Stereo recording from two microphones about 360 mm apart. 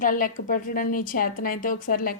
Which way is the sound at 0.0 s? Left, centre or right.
Left.